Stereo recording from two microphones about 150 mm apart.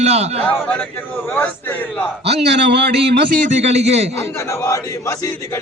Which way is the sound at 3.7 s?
45° right (ahead or behind).